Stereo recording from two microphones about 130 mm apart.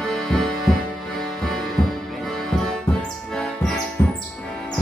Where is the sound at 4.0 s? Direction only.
15° left (ahead or behind).